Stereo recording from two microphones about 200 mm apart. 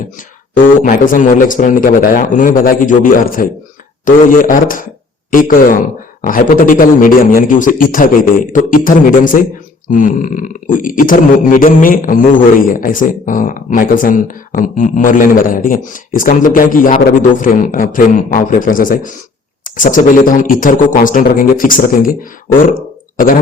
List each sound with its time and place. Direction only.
0.8 s a man's voice: 40° left (ahead or behind)
23.1 s speech: 45° left (ahead or behind)